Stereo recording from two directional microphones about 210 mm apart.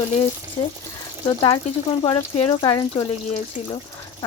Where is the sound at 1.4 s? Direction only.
20° left (ahead or behind).